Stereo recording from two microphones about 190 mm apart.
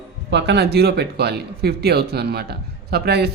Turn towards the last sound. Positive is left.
turn(degrees=-55)  # may be behind; listen again after turning